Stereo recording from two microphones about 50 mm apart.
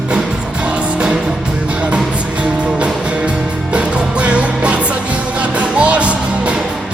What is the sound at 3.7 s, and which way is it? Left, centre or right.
Music, right.